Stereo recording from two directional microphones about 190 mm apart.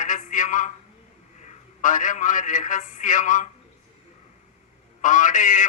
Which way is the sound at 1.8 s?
45° left (ahead or behind).